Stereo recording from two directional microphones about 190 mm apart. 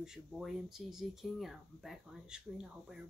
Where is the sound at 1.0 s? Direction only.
Centre (ahead or behind).